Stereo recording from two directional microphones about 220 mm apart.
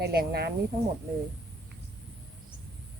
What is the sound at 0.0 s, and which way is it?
Speech, 45° right (ahead or behind).